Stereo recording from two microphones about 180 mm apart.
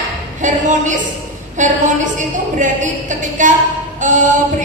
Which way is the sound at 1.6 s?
45° right (ahead or behind).